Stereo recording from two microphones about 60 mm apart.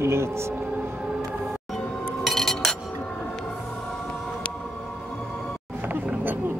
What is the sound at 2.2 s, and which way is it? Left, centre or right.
Chink, centre.